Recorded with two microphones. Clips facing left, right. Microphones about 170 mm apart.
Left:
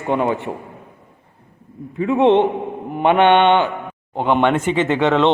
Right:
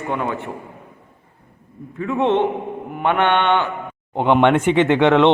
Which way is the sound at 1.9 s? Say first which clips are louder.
Left 4 dB; 20° left (ahead or behind).